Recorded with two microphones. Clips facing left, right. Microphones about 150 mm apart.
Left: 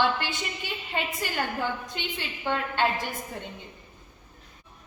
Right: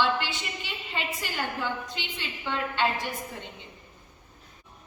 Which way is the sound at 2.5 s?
50° left (ahead or behind).